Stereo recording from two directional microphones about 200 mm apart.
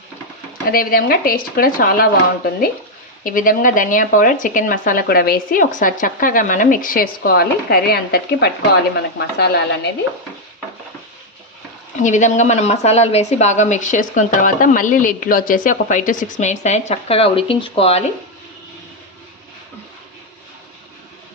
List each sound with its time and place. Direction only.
0.7 s speech: 45° left (ahead or behind)
3.2 s speech: 45° left (ahead or behind)
11.9 s a woman's voice: 35° left (ahead or behind)